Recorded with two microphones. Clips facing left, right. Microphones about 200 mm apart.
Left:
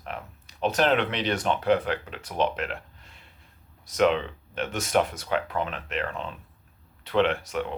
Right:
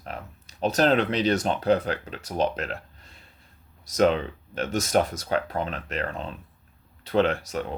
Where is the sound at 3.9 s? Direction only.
40° right (ahead or behind).